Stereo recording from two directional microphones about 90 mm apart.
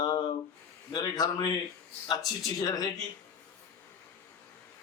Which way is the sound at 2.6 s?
45° left (ahead or behind).